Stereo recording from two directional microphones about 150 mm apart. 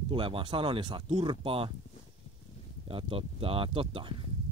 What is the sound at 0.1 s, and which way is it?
Speech, 35° right (ahead or behind).